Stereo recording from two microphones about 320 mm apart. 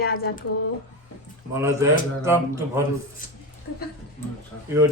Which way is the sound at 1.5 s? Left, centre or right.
Centre.